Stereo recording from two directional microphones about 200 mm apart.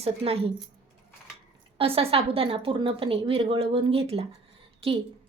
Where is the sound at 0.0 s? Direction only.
30° right (ahead or behind).